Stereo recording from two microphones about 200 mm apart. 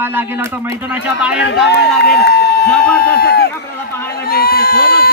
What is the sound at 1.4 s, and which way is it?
A man's voice, 60° left (ahead or behind).